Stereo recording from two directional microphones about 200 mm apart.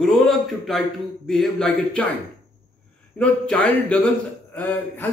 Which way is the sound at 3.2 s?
5° left (ahead or behind).